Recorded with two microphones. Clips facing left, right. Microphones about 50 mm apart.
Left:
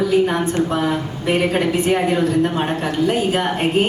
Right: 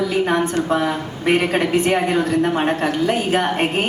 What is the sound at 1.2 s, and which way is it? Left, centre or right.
Speech, right.